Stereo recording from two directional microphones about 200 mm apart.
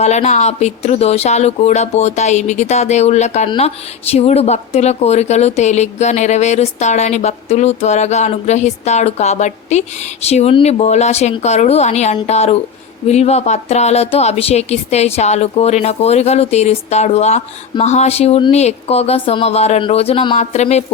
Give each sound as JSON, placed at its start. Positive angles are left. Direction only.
{"t": 0.0, "sound": "speech", "side_deg": 35}